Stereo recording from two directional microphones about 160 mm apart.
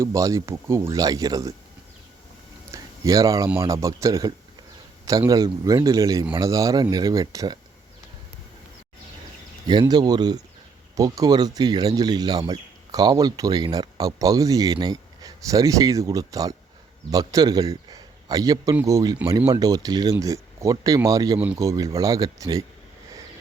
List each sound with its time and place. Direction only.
0.0 s speech: 20° right (ahead or behind)
2.7 s a sound: 20° right (ahead or behind)
3.6 s speech: 20° right (ahead or behind)
9.6 s speech: 25° right (ahead or behind)